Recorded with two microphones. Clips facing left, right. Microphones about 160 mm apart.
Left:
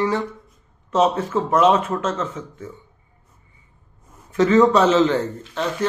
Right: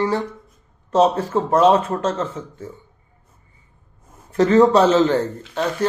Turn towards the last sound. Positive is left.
turn(degrees=-40)  # may be behind; listen again after turning